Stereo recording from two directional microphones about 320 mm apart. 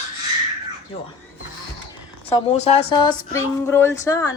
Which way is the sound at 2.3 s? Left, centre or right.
Centre.